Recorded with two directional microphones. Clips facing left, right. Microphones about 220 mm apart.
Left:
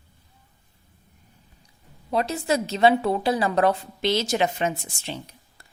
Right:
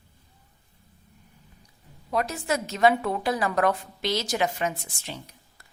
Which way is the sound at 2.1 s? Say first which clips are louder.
Left 3 dB; 30° left (ahead or behind).